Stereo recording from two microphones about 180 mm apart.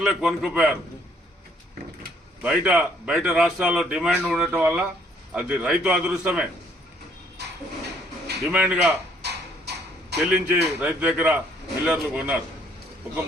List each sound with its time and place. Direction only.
0.0 s a man's voice: 5° right (ahead or behind)
2.4 s a man's voice: 5° right (ahead or behind)
8.5 s a man's voice: 5° right (ahead or behind)
9.2 s a sound: 70° right (ahead or behind)
10.2 s a man's voice: 5° right (ahead or behind)